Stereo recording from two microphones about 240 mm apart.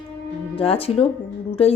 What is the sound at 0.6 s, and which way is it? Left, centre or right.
Speech, left.